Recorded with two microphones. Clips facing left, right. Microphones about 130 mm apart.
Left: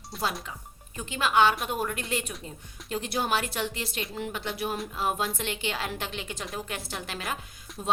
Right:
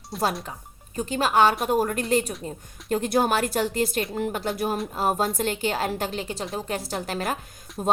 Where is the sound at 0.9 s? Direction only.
40° right (ahead or behind).